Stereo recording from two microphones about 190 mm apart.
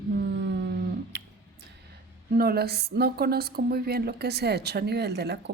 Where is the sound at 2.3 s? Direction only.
55° right (ahead or behind).